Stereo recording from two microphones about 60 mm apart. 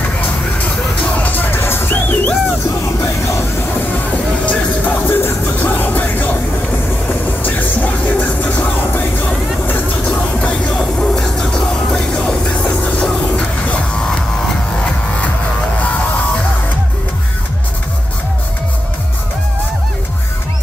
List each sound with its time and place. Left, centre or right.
1.1 s music: left
3.9 s music: left
7.4 s music: left
10.4 s music: centre